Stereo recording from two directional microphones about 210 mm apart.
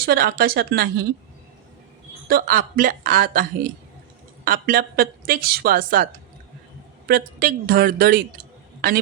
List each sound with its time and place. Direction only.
0.0 s a woman's voice: 45° right (ahead or behind)
2.2 s a woman's voice: 45° right (ahead or behind)
7.1 s a woman's voice: 45° right (ahead or behind)